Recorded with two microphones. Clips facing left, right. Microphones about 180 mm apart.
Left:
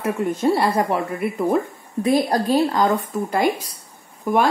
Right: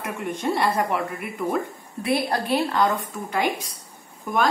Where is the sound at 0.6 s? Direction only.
35° left (ahead or behind).